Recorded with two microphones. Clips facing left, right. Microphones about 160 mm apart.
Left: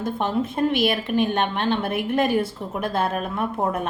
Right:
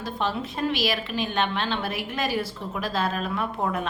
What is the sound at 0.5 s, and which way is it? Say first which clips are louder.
A woman's voice: left 6 dB; 55° left (ahead or behind).